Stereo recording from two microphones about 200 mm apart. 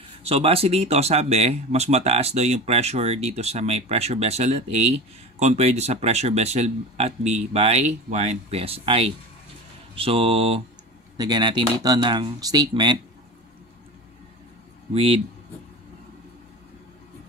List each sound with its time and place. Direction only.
0.3 s speech: 30° right (ahead or behind)
15.0 s speech: 30° right (ahead or behind)